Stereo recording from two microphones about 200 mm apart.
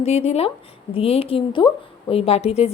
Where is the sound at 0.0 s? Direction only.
30° left (ahead or behind).